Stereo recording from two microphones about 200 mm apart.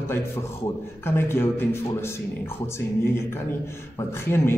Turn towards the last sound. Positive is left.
turn(degrees=10)  # may be behind; listen again after turning